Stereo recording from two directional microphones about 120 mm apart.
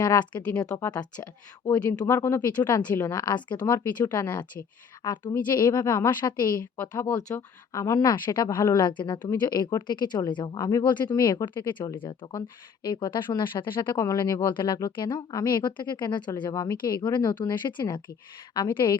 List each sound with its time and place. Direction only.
0.0 s speech: 35° left (ahead or behind)
5.3 s speech: 30° left (ahead or behind)
7.3 s speech: 20° left (ahead or behind); by 14.0 s 40° left (ahead or behind)
14.0 s speech: 30° left (ahead or behind)